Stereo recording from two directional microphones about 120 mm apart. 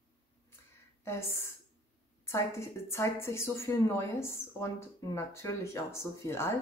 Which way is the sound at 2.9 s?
20° left (ahead or behind).